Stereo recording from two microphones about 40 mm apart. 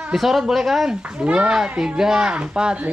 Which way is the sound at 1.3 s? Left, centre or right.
Right.